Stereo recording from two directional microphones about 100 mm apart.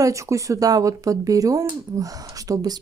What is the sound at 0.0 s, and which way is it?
Speech, 35° right (ahead or behind).